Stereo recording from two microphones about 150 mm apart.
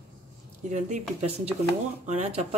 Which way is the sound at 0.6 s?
50° right (ahead or behind).